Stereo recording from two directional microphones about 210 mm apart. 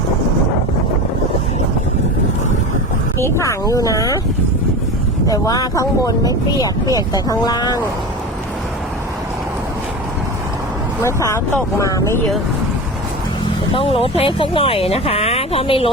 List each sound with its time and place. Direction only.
3.2 s speech: 15° left (ahead or behind)
5.3 s speech: 15° left (ahead or behind)
11.0 s speech: 15° left (ahead or behind)
13.7 s speech: 25° left (ahead or behind)